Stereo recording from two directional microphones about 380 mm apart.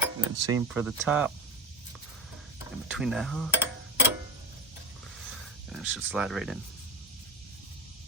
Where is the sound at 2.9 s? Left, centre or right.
Centre.